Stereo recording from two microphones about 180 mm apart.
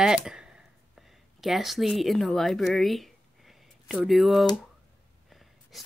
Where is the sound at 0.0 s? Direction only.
5° right (ahead or behind).